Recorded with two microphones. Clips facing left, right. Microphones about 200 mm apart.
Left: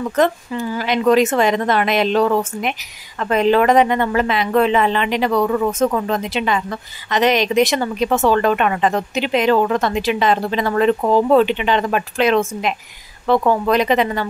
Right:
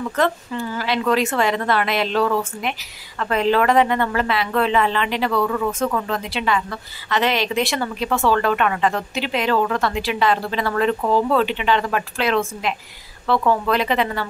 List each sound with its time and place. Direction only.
0.1 s speech: 20° left (ahead or behind)